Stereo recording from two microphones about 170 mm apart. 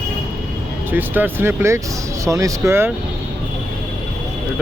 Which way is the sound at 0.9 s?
10° right (ahead or behind).